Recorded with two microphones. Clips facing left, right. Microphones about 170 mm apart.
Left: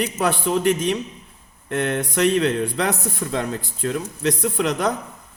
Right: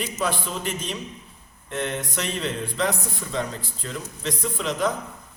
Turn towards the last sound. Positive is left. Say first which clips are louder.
# left 4 dB
turn(degrees=65)  # may be behind; listen again after turning